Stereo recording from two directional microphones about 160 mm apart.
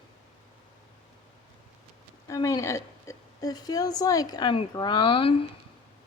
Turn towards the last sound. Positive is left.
turn(degrees=35)  # may be behind; listen again after turning